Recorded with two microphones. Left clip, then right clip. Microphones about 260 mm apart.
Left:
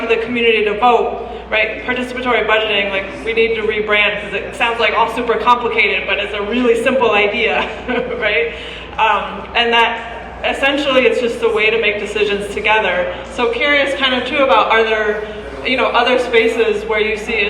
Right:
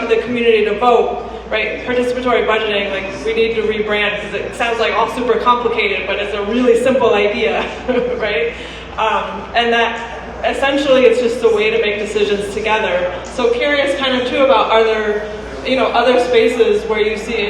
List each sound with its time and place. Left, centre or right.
0.1 s a man's voice: centre
5.5 s a man's voice: centre
9.0 s a man's voice: centre